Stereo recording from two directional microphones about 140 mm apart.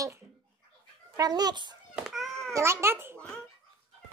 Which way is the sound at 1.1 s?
30° right (ahead or behind).